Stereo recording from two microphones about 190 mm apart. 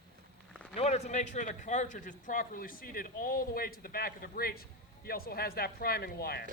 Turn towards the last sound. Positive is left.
turn(degrees=55)  # may be behind; listen again after turning